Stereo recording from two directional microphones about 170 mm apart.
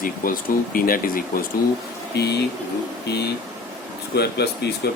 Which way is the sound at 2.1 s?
75° left (ahead or behind).